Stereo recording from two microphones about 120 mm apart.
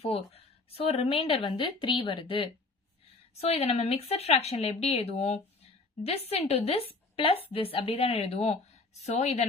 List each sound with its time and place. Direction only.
0.0 s a woman's voice: 55° left (ahead or behind)